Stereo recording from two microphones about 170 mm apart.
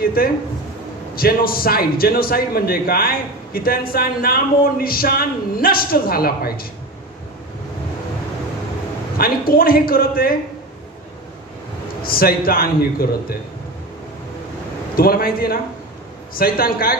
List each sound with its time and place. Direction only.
0.2 s speech: 60° left (ahead or behind)
9.2 s speech: 60° left (ahead or behind)
12.0 s speech: 60° left (ahead or behind)
15.0 s speech: 60° left (ahead or behind)